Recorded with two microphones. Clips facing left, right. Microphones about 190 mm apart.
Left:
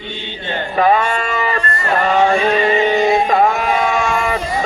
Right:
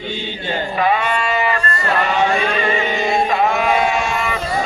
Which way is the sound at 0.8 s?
45° left (ahead or behind).